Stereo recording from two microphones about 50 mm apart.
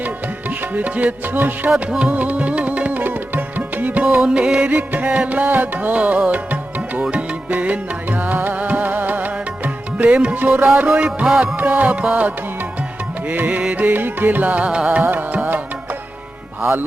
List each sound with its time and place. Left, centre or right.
0.7 s music: right
4.2 s music: centre
4.8 s music: right
5.5 s music: right
6.0 s music: right
11.5 s music: right
14.9 s music: right